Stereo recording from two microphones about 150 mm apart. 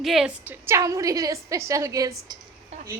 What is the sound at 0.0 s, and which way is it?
A woman's voice, centre (ahead or behind).